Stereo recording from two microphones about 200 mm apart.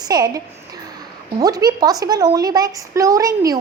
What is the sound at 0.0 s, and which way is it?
A woman's voice, 20° right (ahead or behind).